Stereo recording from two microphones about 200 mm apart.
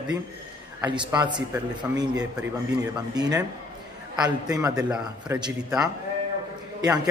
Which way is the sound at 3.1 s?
20° right (ahead or behind).